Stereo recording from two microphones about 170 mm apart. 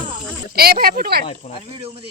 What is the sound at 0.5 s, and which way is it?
Speech, 65° right (ahead or behind).